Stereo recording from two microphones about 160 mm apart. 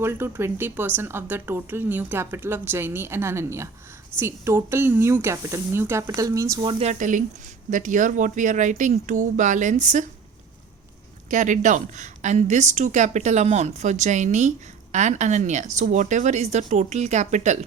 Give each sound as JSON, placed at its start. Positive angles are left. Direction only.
{"t": 0.0, "sound": "speech", "side_deg": -15}
{"t": 6.8, "sound": "a woman's voice", "side_deg": -55}
{"t": 11.3, "sound": "a woman's voice", "side_deg": -50}